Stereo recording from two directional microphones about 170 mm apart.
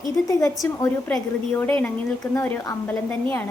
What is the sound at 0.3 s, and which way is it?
Speech, 20° left (ahead or behind).